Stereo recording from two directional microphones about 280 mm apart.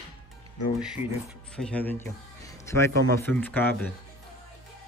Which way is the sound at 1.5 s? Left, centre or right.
Centre.